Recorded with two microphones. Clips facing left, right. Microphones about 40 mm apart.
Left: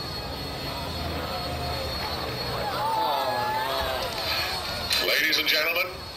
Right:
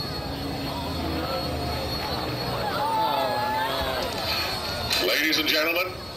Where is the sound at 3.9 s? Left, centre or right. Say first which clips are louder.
Right 1 dB; centre.